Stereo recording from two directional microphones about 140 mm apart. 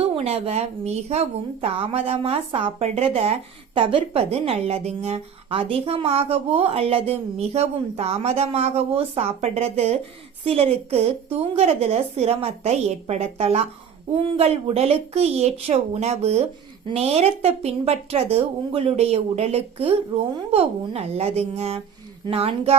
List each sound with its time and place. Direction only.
0.0 s a woman's voice: 45° right (ahead or behind)